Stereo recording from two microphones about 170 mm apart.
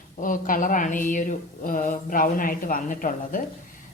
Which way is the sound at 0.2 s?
50° left (ahead or behind).